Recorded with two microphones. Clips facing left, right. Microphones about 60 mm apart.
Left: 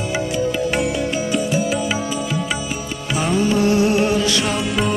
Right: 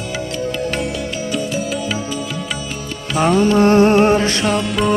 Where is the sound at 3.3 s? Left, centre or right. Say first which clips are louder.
Right 4 dB; right.